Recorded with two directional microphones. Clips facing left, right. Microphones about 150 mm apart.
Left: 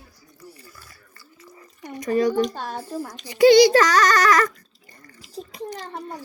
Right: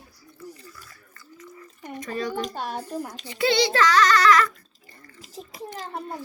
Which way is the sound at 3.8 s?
40° left (ahead or behind).